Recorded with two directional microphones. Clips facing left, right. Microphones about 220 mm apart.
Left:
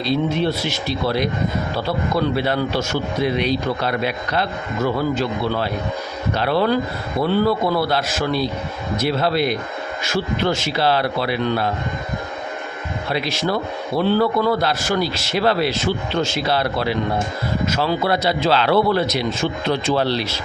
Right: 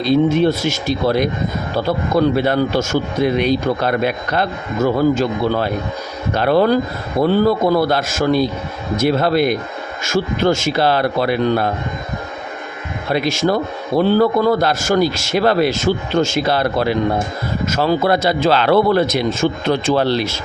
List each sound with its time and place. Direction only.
0.0 s a man's voice: 50° right (ahead or behind)
13.1 s a man's voice: 45° right (ahead or behind)